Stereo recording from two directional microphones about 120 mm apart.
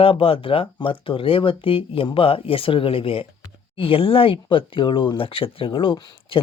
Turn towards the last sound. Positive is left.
turn(degrees=40)  # may be behind; listen again after turning